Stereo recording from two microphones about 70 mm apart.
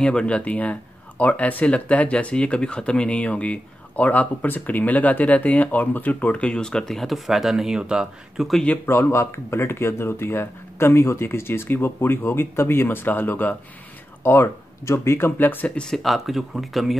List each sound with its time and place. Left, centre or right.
0.0 s speech: centre
8.8 s speech: left
15.7 s speech: centre